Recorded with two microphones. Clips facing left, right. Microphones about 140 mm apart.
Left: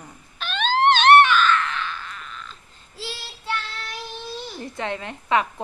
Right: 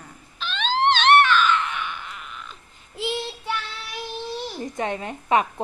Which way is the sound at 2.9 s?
20° right (ahead or behind).